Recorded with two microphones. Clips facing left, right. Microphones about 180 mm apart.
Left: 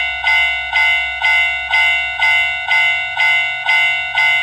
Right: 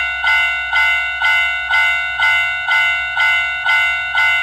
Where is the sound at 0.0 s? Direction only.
20° left (ahead or behind).